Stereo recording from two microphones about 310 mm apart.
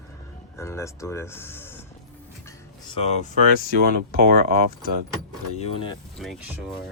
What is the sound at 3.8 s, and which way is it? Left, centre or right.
Speech, right.